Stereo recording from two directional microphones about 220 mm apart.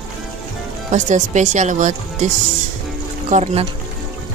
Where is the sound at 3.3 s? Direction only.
30° right (ahead or behind).